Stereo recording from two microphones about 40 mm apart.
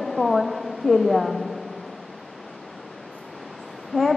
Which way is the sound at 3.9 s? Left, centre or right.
Left.